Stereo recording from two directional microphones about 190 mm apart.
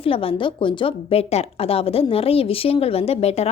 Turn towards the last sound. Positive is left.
turn(degrees=35)  # may be behind; listen again after turning